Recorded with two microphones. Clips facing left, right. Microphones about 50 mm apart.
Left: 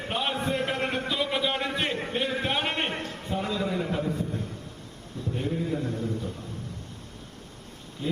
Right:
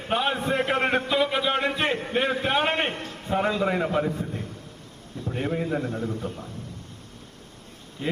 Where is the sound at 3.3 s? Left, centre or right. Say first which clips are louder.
Right 6 dB; right.